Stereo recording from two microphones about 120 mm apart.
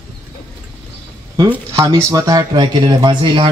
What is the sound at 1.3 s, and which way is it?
Speech, 30° right (ahead or behind).